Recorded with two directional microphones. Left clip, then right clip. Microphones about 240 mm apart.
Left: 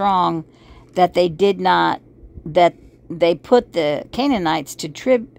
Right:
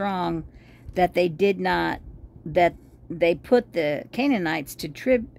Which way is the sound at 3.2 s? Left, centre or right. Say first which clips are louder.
Left 5 dB; centre.